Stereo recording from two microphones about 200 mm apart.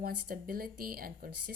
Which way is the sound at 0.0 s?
45° right (ahead or behind).